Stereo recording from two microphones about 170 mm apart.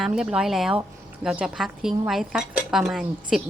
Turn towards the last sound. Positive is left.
turn(degrees=0)  # may be behind; listen again after turning